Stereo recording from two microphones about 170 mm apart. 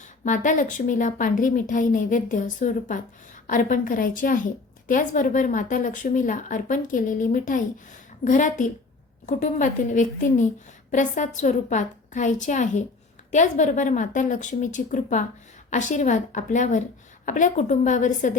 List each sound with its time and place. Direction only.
0.3 s a woman's voice: 50° left (ahead or behind)